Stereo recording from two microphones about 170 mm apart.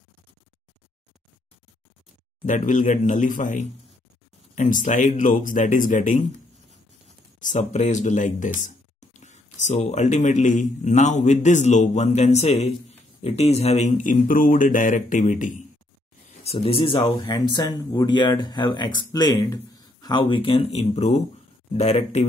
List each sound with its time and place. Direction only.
2.4 s speech: 45° left (ahead or behind)
7.3 s speech: 45° left (ahead or behind)
16.4 s speech: 35° left (ahead or behind)